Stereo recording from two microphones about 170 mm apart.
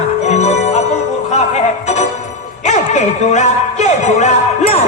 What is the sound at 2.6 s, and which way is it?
Speech, 45° left (ahead or behind).